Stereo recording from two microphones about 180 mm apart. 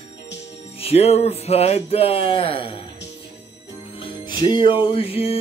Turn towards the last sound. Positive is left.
turn(degrees=30)  # may be behind; listen again after turning